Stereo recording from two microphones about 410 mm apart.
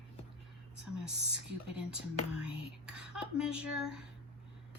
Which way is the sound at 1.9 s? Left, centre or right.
Centre.